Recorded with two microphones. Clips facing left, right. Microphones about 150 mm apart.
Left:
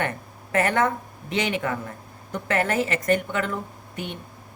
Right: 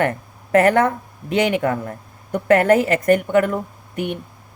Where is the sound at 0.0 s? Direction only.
60° right (ahead or behind).